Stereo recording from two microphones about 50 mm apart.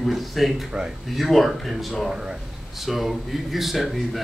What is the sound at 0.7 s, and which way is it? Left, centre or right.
Speech, centre.